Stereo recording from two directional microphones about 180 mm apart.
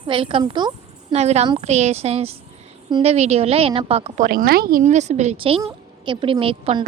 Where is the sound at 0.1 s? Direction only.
30° right (ahead or behind); by 4.8 s 55° right (ahead or behind).